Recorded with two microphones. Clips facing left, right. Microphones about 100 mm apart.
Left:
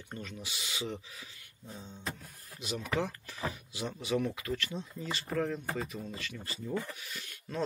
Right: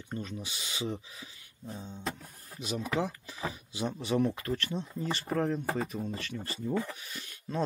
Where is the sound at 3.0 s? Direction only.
20° right (ahead or behind).